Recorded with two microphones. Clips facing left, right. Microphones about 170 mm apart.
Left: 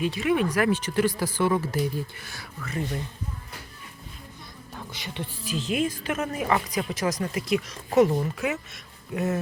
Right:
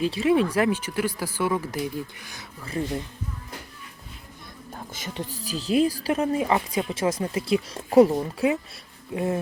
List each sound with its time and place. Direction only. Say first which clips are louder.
0.0 s speech: right 3 dB; 30° right (ahead or behind)
0.7 s speech: left 2 dB; 10° right (ahead or behind); by 2.8 s 25° right (ahead or behind)
4.7 s speech: right 2 dB; 45° right (ahead or behind); by 9.4 s 30° right (ahead or behind)